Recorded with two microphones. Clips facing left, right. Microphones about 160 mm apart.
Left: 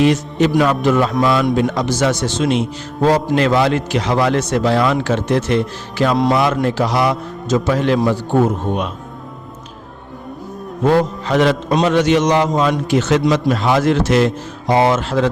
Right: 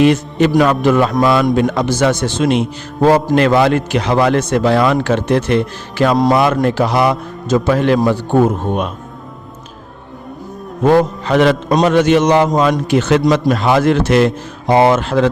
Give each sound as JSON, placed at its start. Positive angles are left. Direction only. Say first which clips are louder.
{"t": 0.0, "sound": "a man's voice", "louder": "right 2 dB", "side_deg": -60}
{"t": 10.9, "sound": "a man's voice", "louder": "right 3 dB", "side_deg": -65}
{"t": 11.7, "sound": "a man's voice", "louder": "right 3 dB", "side_deg": -45}